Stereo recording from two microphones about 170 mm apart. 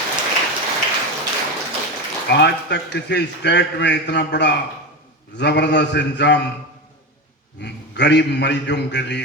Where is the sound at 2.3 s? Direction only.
90° left.